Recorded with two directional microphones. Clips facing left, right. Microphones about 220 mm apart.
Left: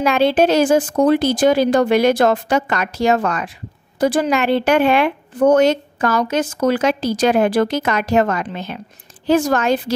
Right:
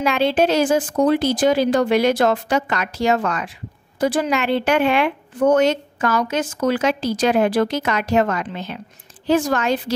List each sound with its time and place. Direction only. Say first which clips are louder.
0.0 s a woman's voice: left 3 dB; 45° left (ahead or behind)